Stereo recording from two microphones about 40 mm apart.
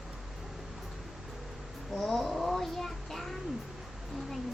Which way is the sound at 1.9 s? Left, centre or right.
Centre.